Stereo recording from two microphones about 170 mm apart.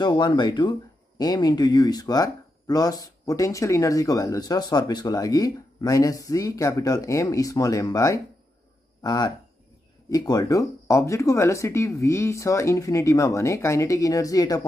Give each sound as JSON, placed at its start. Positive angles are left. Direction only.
{"t": 0.0, "sound": "speech", "side_deg": 25}